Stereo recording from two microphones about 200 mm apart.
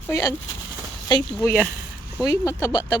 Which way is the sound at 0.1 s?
15° left (ahead or behind).